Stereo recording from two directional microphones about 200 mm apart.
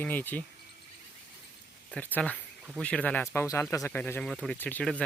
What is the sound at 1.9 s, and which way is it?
Speech, 5° left (ahead or behind).